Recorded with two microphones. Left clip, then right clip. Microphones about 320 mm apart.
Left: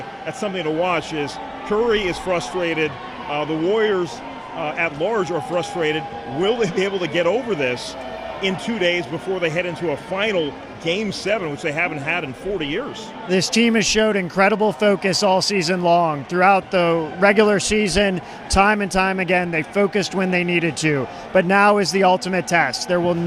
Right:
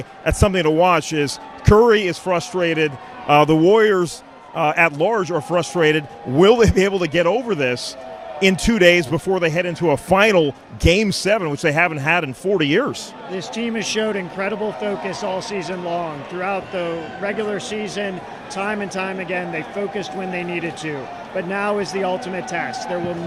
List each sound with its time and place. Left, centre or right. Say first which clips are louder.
0.3 s a man's voice: right 7 dB; right
13.3 s speech: left 8 dB; left